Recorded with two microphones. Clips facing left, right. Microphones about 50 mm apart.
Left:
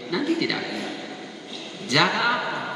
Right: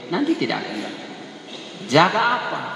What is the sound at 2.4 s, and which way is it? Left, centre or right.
Speech, centre.